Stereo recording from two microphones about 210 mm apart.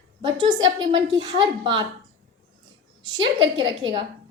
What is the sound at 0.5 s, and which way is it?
Speech, 65° right (ahead or behind).